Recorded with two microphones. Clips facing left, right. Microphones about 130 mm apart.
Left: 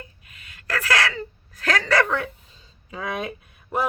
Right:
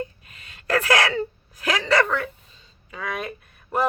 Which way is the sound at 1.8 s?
Centre (ahead or behind).